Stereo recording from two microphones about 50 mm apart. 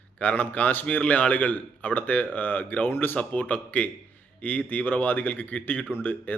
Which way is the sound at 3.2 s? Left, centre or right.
Left.